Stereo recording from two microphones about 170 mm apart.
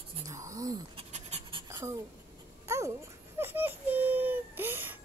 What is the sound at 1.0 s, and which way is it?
Pant, 40° right (ahead or behind).